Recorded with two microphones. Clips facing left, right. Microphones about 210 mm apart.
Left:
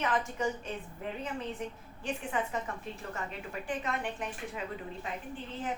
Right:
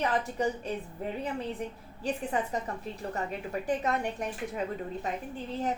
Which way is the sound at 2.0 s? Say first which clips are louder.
Right 3 dB; 35° right (ahead or behind).